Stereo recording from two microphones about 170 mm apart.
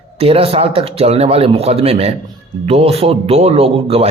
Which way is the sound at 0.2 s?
35° right (ahead or behind).